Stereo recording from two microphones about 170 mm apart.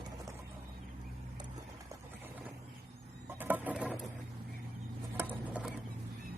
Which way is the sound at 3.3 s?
10° right (ahead or behind).